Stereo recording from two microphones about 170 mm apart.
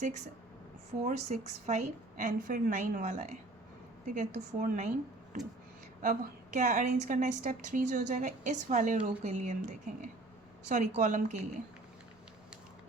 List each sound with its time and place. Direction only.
1.0 s a woman's voice: 40° right (ahead or behind)
6.0 s a woman's voice: 50° right (ahead or behind)